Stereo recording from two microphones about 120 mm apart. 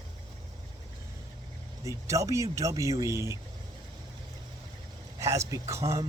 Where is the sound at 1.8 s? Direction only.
25° right (ahead or behind).